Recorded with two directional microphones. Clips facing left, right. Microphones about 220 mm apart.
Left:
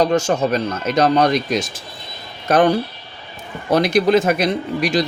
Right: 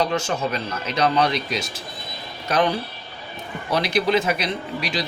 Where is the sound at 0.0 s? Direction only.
45° left (ahead or behind).